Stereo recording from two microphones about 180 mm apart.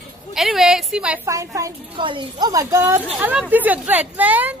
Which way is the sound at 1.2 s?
15° right (ahead or behind).